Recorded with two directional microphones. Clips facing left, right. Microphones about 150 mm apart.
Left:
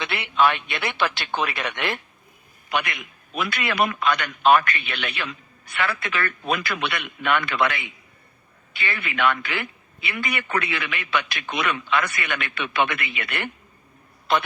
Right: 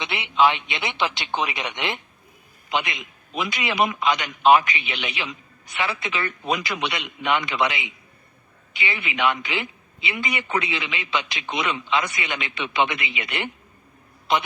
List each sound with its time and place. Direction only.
0.0 s a man's voice: 20° right (ahead or behind)